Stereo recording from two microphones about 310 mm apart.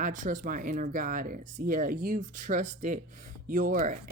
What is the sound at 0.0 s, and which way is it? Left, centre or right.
Speech, right.